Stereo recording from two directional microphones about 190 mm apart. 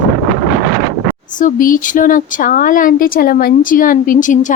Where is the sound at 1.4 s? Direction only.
45° left (ahead or behind).